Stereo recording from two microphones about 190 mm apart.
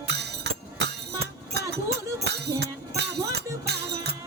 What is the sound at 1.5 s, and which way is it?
Music, 60° right (ahead or behind).